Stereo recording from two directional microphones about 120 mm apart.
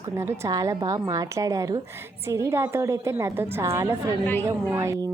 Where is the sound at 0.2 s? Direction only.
25° right (ahead or behind).